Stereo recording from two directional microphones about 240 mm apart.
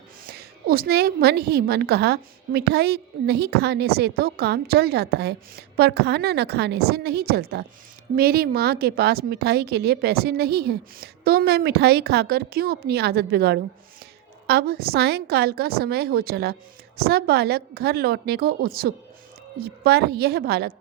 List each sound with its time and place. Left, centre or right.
0.3 s a woman's voice: right